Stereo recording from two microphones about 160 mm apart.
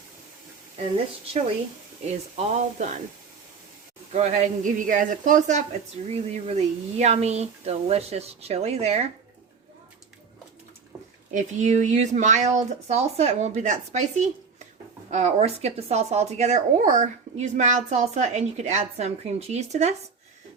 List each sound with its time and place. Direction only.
2.0 s speech: 45° right (ahead or behind)
4.1 s speech: 45° right (ahead or behind)
11.3 s speech: 50° right (ahead or behind)